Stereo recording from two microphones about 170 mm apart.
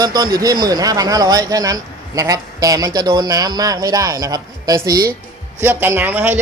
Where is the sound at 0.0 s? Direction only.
25° right (ahead or behind).